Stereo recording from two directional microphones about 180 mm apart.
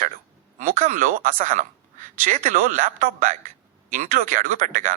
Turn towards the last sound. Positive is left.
turn(degrees=-45)  # may be behind; listen again after turning